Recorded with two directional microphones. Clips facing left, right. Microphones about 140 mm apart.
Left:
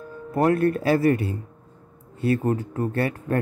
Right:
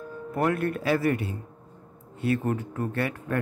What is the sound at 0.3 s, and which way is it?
A man's voice, 35° left (ahead or behind).